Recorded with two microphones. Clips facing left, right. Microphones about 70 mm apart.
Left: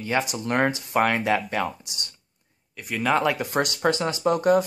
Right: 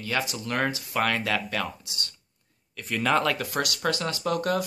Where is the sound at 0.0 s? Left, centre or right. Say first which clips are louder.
Left 4 dB; left.